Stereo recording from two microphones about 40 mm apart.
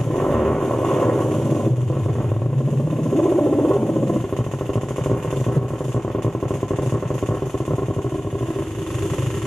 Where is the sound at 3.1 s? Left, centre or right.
Centre.